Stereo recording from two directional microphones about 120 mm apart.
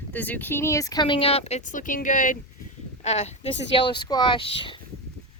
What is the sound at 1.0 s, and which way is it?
A woman's voice, 50° left (ahead or behind).